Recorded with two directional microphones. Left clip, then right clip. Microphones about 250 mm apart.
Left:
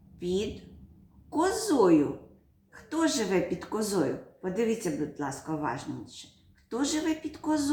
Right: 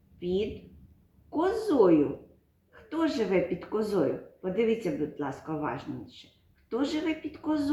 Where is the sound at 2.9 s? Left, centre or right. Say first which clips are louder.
Even; centre.